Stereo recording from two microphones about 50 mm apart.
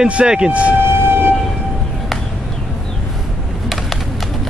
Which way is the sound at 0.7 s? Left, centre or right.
Right.